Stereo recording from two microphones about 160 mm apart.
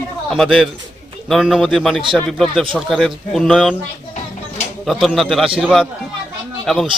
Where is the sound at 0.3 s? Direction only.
Centre (ahead or behind).